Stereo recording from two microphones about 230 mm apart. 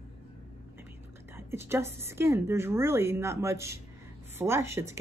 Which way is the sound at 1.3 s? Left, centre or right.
Centre.